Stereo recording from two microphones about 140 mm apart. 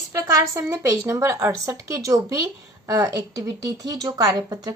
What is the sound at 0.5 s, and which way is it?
Speech, 20° right (ahead or behind).